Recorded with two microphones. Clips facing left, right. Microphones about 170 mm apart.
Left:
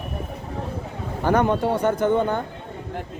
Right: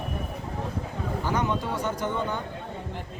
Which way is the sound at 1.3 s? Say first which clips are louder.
Left 9 dB; 55° left (ahead or behind).